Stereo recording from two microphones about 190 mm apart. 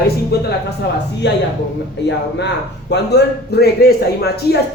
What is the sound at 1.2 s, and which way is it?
Speech, 65° left (ahead or behind).